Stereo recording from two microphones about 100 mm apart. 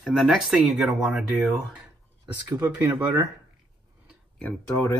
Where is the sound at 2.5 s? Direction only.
15° right (ahead or behind).